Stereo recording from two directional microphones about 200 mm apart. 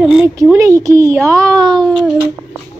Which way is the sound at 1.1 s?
5° left (ahead or behind).